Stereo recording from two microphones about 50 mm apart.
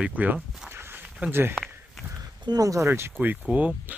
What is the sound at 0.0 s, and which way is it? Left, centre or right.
Speech, right.